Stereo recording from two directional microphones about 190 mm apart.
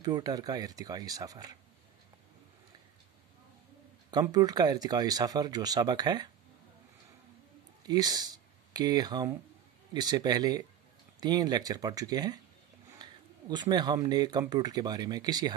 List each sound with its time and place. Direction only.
0.0 s speech: 20° right (ahead or behind)
4.1 s speech: 20° right (ahead or behind)
7.8 s speech: 20° right (ahead or behind)